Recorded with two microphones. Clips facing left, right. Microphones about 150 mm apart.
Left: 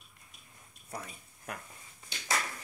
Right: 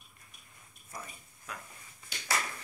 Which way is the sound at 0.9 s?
60° left (ahead or behind).